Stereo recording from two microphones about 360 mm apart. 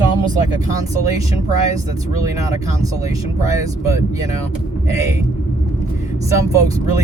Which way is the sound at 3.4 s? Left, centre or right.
Centre.